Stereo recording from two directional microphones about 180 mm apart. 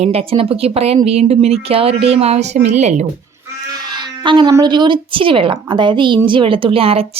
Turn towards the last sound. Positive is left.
turn(degrees=-30)  # may be behind; listen again after turning